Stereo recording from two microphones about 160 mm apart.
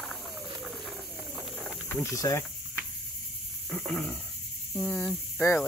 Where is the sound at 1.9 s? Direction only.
15° left (ahead or behind).